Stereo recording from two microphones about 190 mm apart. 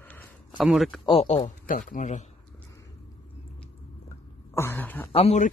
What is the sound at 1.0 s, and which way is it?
Speech, 30° left (ahead or behind).